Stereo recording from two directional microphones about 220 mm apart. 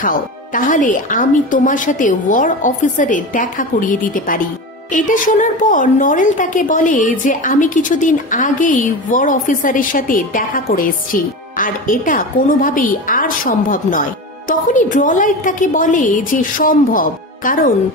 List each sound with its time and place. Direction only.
0.0 s a woman's voice: 35° left (ahead or behind)